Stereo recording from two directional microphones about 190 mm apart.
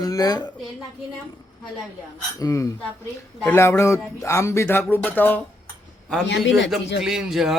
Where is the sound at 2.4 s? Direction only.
15° left (ahead or behind).